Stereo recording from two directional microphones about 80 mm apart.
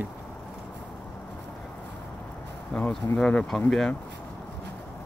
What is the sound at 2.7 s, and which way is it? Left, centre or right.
Speech, centre.